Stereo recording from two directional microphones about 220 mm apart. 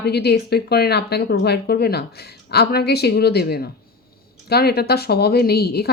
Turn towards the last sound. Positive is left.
turn(degrees=45)  # may be behind; listen again after turning